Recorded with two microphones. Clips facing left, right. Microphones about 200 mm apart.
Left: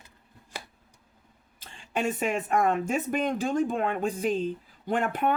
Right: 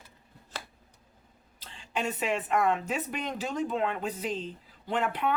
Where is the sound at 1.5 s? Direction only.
50° left (ahead or behind).